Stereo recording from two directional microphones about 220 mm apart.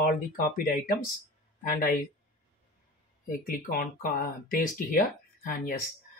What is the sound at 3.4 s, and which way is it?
Speech, 40° left (ahead or behind).